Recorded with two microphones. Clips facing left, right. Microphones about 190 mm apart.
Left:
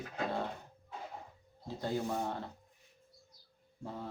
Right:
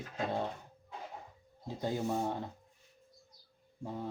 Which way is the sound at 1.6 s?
15° right (ahead or behind).